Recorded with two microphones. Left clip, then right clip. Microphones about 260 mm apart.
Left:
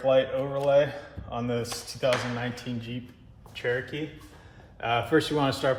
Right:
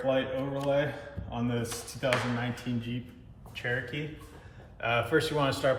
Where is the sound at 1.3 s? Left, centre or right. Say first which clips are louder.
Left 4 dB; left.